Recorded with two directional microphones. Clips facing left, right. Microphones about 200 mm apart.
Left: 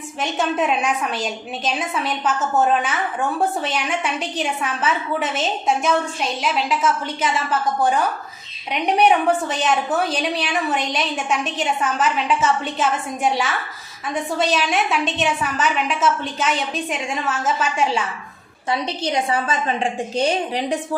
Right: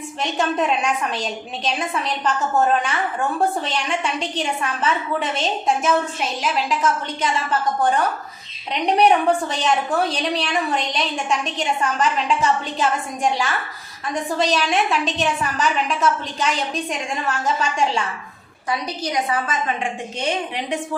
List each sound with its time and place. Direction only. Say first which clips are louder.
0.2 s a woman's voice: even; 5° left (ahead or behind)
18.7 s a woman's voice: left 2 dB; 30° left (ahead or behind)